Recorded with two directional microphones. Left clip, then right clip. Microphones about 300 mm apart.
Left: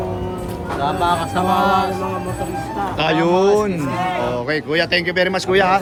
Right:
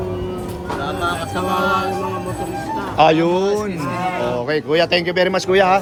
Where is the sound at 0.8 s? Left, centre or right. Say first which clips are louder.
Left 4 dB; left.